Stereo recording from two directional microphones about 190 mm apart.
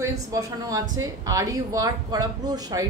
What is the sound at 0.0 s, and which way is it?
A man's voice, 15° right (ahead or behind).